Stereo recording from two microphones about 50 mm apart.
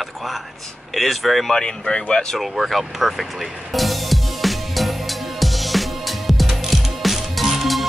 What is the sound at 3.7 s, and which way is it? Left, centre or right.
Music, centre.